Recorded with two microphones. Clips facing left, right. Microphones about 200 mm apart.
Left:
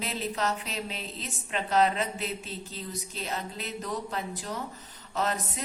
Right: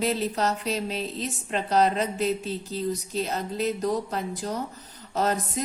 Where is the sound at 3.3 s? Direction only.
40° right (ahead or behind).